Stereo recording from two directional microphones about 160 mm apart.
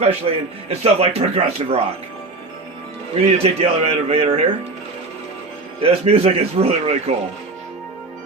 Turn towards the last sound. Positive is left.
turn(degrees=-40)  # may be behind; listen again after turning